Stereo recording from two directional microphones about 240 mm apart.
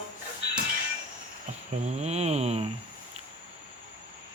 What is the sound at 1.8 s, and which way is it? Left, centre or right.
Speech, right.